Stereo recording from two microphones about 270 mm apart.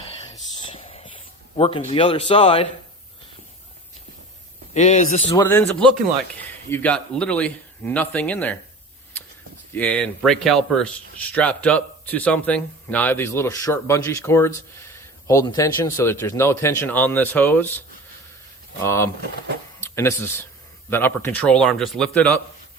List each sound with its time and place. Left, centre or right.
0.0 s a sound: centre
1.9 s speech: left
4.7 s speech: left
5.3 s speech: centre
9.7 s speech: centre
18.9 s speech: centre